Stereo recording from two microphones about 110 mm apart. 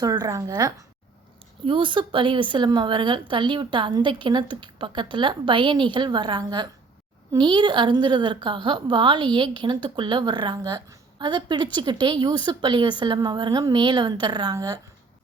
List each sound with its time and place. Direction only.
0.0 s a woman's voice: 35° right (ahead or behind)
1.6 s a woman's voice: 50° right (ahead or behind); by 14.8 s 35° right (ahead or behind)